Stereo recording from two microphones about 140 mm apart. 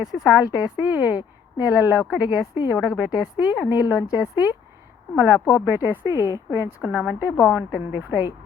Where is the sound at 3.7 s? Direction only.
30° left (ahead or behind).